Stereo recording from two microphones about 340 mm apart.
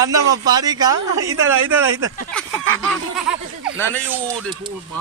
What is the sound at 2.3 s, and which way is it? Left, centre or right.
Speech, centre.